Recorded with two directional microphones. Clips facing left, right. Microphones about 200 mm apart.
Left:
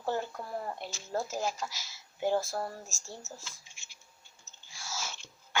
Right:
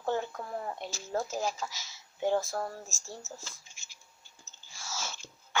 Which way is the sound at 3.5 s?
40° right (ahead or behind).